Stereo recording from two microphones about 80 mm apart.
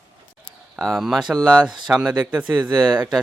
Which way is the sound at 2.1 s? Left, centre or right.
Centre.